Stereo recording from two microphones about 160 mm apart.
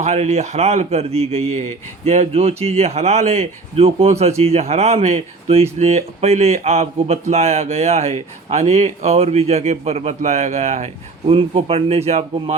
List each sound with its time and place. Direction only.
0.0 s a man's voice: 45° right (ahead or behind)